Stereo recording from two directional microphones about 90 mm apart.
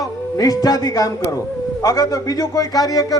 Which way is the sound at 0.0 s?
40° left (ahead or behind).